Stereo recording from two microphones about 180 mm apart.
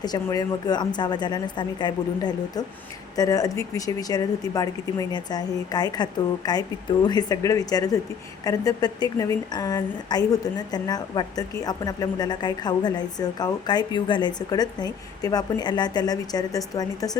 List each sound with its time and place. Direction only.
0.0 s a woman's voice: 20° left (ahead or behind)